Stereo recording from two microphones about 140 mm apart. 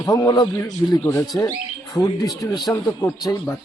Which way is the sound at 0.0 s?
25° left (ahead or behind).